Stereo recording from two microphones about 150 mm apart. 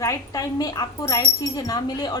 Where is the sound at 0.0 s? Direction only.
20° left (ahead or behind).